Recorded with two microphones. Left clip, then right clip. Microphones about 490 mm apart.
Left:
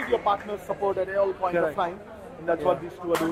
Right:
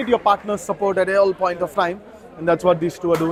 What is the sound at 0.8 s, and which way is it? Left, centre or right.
Speech, right.